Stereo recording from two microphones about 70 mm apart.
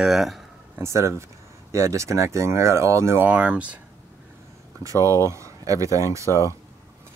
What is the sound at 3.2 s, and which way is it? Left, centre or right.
Speech, centre.